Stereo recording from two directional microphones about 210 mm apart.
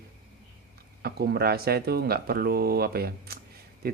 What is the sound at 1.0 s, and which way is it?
Speech, 50° right (ahead or behind).